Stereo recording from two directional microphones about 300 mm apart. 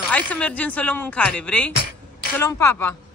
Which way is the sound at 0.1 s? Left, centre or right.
Centre.